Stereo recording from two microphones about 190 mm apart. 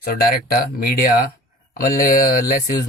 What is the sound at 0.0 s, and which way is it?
Speech, 55° left (ahead or behind).